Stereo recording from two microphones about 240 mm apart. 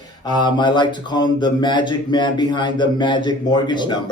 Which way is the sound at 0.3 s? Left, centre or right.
Centre.